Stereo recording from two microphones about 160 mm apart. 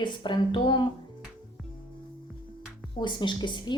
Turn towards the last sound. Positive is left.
turn(degrees=25)  # may be behind; listen again after turning